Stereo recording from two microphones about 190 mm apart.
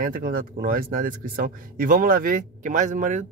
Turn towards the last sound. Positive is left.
turn(degrees=-40)  # may be behind; listen again after turning